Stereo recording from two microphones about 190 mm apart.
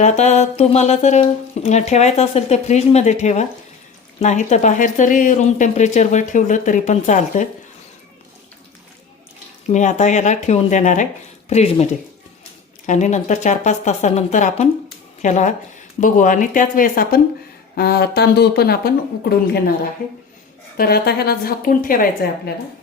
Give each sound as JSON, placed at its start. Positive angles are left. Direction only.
{"t": 0.0, "sound": "speech", "side_deg": 35}
{"t": 9.6, "sound": "a woman's voice", "side_deg": 40}
{"t": 20.7, "sound": "a woman's voice", "side_deg": 55}